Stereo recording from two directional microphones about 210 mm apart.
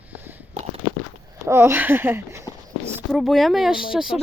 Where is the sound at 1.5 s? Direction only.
10° right (ahead or behind).